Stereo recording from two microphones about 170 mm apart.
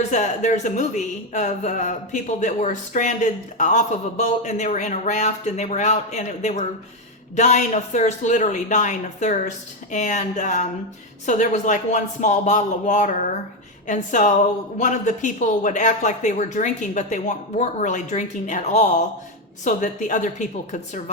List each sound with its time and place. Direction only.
0.1 s speech: 45° left (ahead or behind)